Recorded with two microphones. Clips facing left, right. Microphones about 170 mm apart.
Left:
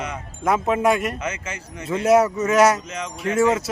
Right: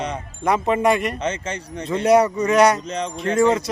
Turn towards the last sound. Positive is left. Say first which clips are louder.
# right 2 dB
turn(degrees=5)  # may be behind; listen again after turning